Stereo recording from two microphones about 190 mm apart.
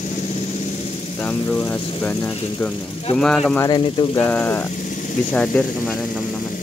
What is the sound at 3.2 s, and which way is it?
Speech, 5° left (ahead or behind).